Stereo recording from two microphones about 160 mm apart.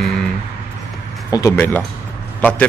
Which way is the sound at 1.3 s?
15° left (ahead or behind).